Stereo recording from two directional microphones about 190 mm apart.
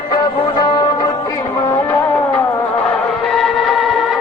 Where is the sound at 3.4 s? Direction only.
Centre (ahead or behind).